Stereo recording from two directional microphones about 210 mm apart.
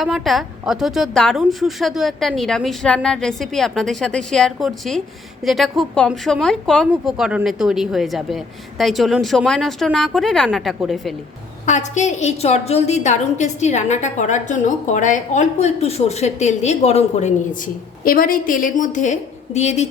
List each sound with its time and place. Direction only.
0.0 s a woman's voice: centre (ahead or behind)
11.6 s a woman's voice: 35° left (ahead or behind)